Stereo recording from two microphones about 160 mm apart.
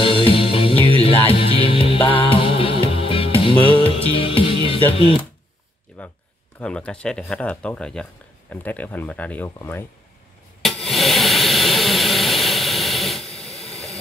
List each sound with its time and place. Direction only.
0.0 s music: 35° left (ahead or behind)
0.7 s music: 35° right (ahead or behind)
1.4 s music: 35° left (ahead or behind)
6.0 s a sound: 10° left (ahead or behind)
6.6 s speech: 5° left (ahead or behind)
10.6 s a sound: centre (ahead or behind)
13.3 s hiss: 40° left (ahead or behind)
13.7 s vehicle: centre (ahead or behind)